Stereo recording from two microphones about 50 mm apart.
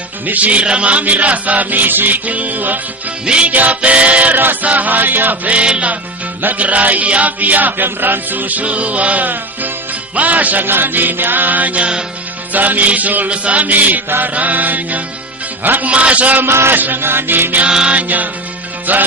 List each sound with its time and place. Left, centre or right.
0.3 s chant: right
3.2 s music: right
3.5 s chant: right
3.8 s music: right
4.6 s chant: right
5.5 s music: right
6.4 s chant: right
15.9 s music: right
16.4 s music: right
16.7 s music: right
17.7 s chant: centre
17.9 s chant: right